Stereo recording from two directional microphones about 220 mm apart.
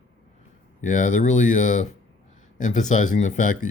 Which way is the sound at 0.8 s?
35° left (ahead or behind).